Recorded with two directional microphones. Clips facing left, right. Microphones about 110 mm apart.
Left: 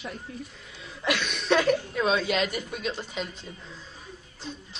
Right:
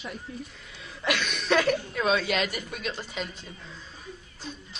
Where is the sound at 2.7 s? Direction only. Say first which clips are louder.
Left 2 dB; 10° left (ahead or behind).